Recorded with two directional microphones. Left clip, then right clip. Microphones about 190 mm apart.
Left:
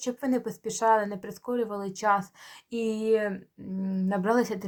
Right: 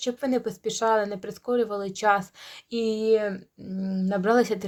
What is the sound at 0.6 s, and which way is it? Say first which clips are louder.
Speech: left 1 dB; 25° right (ahead or behind).